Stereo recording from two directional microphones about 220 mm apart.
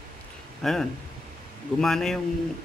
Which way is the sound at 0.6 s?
Centre (ahead or behind).